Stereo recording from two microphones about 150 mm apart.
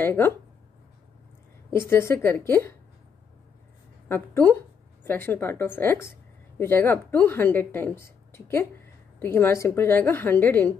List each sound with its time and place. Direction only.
0.0 s speech: 15° left (ahead or behind)
1.7 s speech: 15° left (ahead or behind)
4.1 s speech: 15° left (ahead or behind)